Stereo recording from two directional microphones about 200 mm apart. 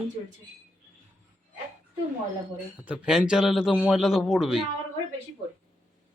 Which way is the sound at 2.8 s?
5° right (ahead or behind).